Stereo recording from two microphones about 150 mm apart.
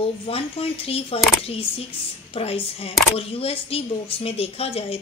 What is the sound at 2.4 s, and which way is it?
A woman's voice, 40° left (ahead or behind).